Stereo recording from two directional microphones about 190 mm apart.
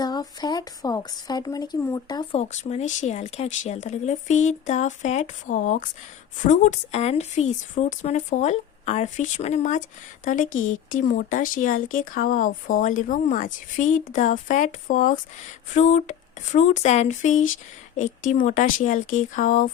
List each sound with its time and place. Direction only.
0.0 s speech: 20° left (ahead or behind)
2.4 s speech: 35° left (ahead or behind)